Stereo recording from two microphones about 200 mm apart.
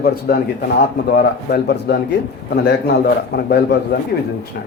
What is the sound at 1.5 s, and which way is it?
A man's voice, 55° left (ahead or behind).